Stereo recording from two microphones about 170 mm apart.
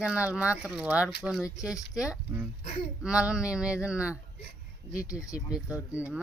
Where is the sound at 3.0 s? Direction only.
5° right (ahead or behind).